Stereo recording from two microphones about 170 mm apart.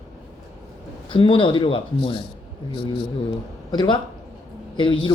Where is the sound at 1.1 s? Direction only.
30° left (ahead or behind).